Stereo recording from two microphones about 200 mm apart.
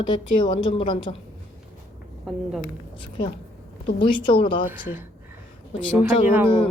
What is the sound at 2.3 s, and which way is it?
Speech, 5° right (ahead or behind).